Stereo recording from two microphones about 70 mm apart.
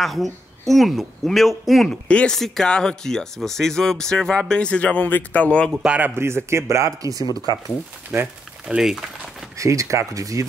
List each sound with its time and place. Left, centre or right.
0.0 s speech: centre
2.0 s speech: centre
2.3 s speech: centre
5.9 s speech: right
6.1 s speech: right
8.1 s speech: right
8.6 s speech: centre
9.6 s speech: right